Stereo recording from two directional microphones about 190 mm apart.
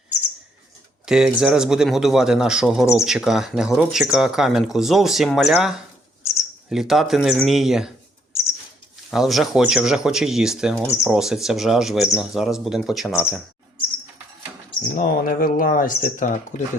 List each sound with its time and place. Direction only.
1.0 s speech: 5° right (ahead or behind)
9.0 s speech: centre (ahead or behind)
14.9 s speech: 50° left (ahead or behind)